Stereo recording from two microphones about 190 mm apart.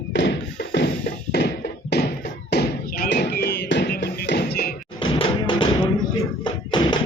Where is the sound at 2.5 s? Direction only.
60° left (ahead or behind).